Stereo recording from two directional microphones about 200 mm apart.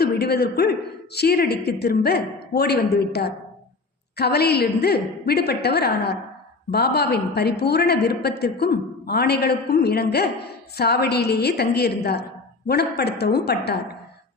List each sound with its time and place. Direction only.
0.0 s a woman's voice: 55° left (ahead or behind)